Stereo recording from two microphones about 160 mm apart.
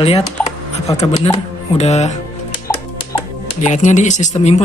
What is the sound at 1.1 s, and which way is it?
Speech, 25° left (ahead or behind).